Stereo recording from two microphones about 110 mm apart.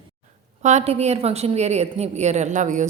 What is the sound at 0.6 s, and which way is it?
A woman's voice, 90° right.